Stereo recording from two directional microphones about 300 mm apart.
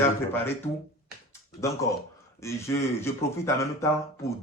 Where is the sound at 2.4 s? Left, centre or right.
Centre.